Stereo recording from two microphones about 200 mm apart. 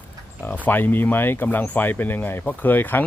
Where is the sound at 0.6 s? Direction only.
10° left (ahead or behind).